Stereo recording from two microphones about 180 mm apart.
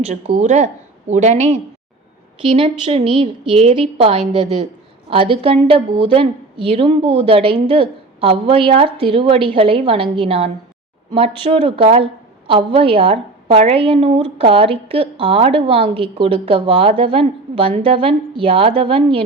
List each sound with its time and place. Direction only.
0.0 s a woman's voice: 40° right (ahead or behind)